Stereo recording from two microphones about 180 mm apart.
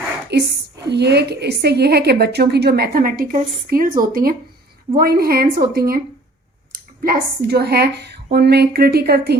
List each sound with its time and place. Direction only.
0.3 s a woman's voice: 65° right (ahead or behind)